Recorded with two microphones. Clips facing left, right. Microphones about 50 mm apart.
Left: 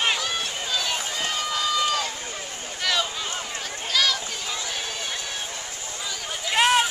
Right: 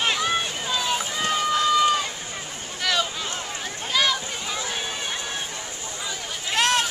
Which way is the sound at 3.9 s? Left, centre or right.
Centre.